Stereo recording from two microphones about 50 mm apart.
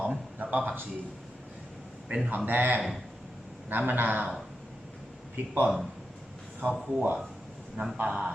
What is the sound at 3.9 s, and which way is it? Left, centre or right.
Speech, right.